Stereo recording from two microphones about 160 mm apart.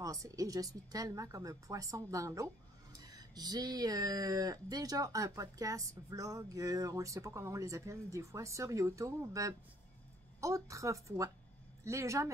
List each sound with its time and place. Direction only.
0.0 s speech: 20° right (ahead or behind)